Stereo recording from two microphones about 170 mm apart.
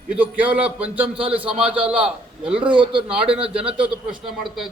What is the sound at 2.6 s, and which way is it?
A man's voice, 30° right (ahead or behind).